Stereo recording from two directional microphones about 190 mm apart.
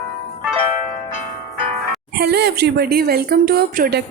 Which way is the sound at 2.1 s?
60° right (ahead or behind).